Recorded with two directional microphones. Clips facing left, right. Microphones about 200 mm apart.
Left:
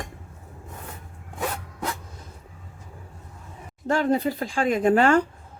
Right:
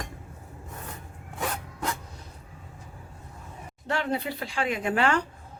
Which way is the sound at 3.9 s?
45° left (ahead or behind).